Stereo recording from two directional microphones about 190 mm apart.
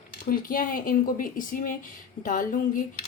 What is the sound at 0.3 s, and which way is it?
A woman's voice, 45° left (ahead or behind).